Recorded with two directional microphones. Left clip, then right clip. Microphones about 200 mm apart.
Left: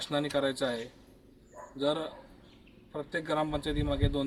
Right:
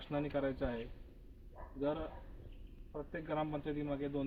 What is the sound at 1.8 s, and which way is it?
Speech, 15° left (ahead or behind).